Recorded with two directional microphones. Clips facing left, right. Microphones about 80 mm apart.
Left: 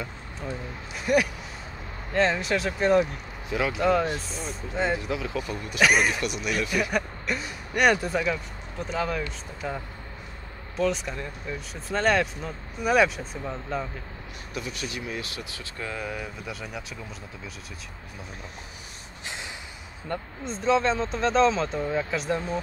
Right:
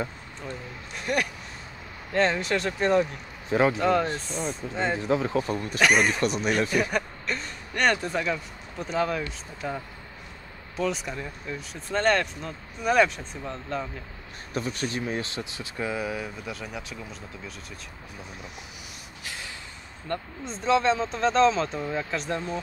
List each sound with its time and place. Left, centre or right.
0.4 s speech: centre
3.4 s speech: right
3.8 s speech: centre
4.9 s speech: right
5.8 s speech: centre
6.0 s speech: right
6.9 s speech: centre
14.5 s speech: right; by 16.8 s centre
19.2 s snort: left
20.1 s speech: centre